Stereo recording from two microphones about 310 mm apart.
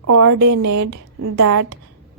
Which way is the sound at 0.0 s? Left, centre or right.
Right.